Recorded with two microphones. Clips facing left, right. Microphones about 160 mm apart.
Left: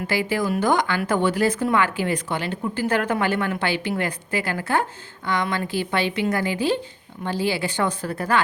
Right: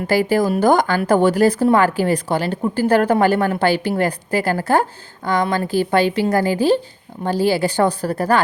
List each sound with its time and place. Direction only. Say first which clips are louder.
0.1 s speech: right 7 dB; 40° right (ahead or behind)